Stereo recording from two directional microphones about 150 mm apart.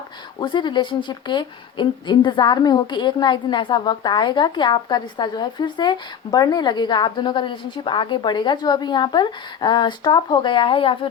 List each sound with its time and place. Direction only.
0.3 s a woman's voice: 30° left (ahead or behind)